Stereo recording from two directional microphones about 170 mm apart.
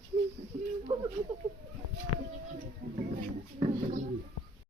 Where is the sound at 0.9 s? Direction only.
25° right (ahead or behind).